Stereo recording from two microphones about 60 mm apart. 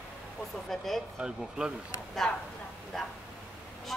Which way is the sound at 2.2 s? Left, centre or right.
Centre.